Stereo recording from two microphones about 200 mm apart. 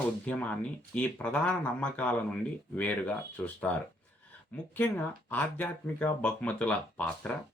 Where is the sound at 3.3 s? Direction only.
5° left (ahead or behind).